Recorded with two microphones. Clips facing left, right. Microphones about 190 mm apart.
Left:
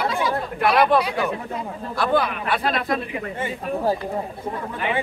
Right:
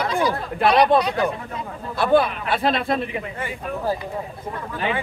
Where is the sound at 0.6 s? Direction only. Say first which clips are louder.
Right 2 dB; 25° right (ahead or behind).